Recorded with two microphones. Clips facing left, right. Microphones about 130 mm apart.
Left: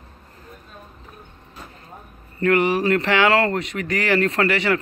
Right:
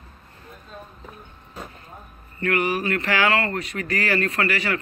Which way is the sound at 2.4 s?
25° left (ahead or behind).